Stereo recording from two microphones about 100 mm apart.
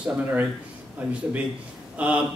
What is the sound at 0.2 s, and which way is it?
Speech, 15° right (ahead or behind).